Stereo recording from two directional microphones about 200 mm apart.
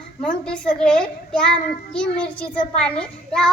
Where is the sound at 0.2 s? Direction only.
5° left (ahead or behind).